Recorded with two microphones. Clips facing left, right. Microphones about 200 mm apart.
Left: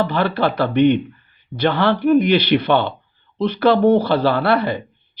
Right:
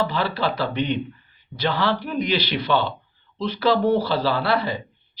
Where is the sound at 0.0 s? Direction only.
55° left (ahead or behind).